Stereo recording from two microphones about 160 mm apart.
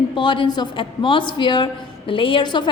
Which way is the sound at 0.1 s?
30° left (ahead or behind).